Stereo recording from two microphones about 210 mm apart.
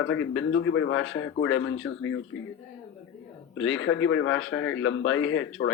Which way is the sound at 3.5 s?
70° left (ahead or behind).